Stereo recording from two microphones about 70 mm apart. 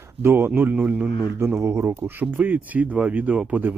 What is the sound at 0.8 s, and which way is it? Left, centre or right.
Speech, centre.